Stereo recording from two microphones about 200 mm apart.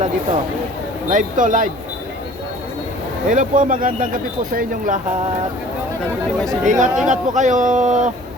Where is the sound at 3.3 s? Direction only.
40° right (ahead or behind).